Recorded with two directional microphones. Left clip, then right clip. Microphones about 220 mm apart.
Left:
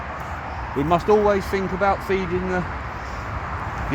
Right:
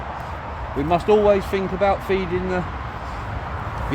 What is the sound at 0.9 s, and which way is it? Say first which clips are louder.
Speech: right 1 dB; 5° left (ahead or behind).